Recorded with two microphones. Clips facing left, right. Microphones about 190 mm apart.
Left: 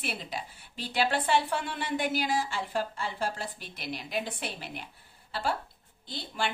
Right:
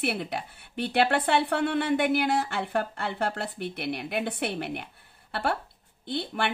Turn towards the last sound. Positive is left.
turn(degrees=-60)  # may be behind; listen again after turning